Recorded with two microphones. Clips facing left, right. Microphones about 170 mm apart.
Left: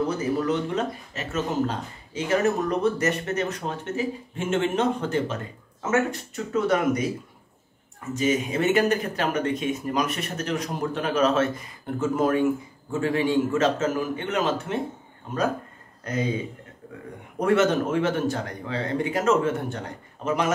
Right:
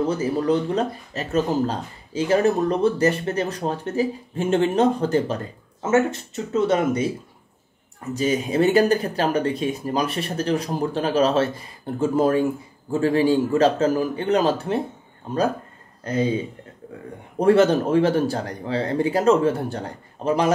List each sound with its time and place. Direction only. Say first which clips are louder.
0.2 s speech: right 3 dB; 35° right (ahead or behind)
8.1 s speech: right 2 dB; 35° right (ahead or behind)
16.0 s speech: right 5 dB; 30° right (ahead or behind)
17.4 s speech: right 5 dB; 30° right (ahead or behind)